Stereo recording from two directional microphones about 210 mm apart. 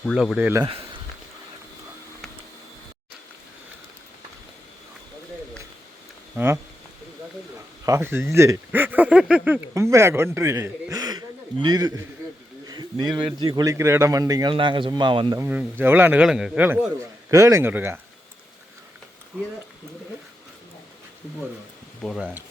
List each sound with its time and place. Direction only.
0.0 s speech: centre (ahead or behind)
6.3 s speech: 10° right (ahead or behind)
7.9 s a man's voice: 15° right (ahead or behind)
15.4 s speech: 10° right (ahead or behind)
22.0 s speech: 5° right (ahead or behind)